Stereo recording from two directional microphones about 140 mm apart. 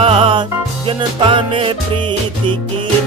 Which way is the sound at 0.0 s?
40° right (ahead or behind).